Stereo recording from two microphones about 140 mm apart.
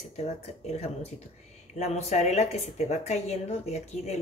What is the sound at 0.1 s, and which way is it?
Speech, 50° left (ahead or behind).